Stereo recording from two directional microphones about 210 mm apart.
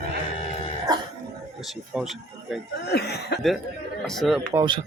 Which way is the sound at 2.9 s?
50° left (ahead or behind).